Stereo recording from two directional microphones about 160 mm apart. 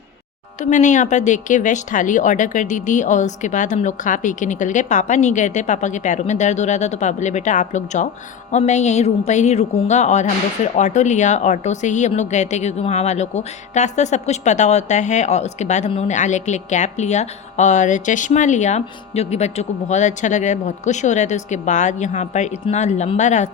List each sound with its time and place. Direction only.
0.6 s speech: 50° left (ahead or behind)